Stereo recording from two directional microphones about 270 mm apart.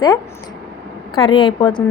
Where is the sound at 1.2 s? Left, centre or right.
Centre.